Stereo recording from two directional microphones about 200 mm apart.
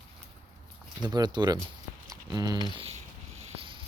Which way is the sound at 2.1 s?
20° right (ahead or behind).